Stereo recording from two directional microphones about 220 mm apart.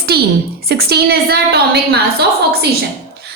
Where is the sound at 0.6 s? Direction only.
45° right (ahead or behind).